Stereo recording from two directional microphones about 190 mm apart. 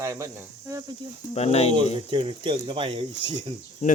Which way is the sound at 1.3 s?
35° left (ahead or behind).